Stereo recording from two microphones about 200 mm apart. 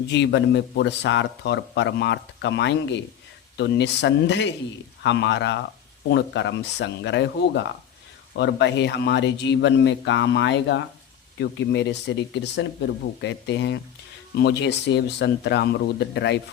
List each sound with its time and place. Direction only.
0.1 s a man's voice: 60° left (ahead or behind)